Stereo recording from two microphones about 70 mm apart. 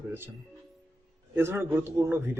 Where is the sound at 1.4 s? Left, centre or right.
Right.